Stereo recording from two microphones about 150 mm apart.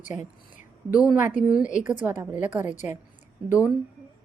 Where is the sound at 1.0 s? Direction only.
10° right (ahead or behind).